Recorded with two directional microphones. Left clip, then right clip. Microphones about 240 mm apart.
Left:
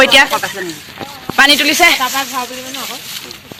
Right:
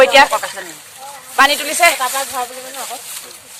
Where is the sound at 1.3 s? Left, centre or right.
Centre.